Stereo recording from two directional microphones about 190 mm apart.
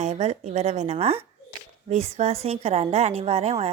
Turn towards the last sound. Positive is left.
turn(degrees=-35)  # may be behind; listen again after turning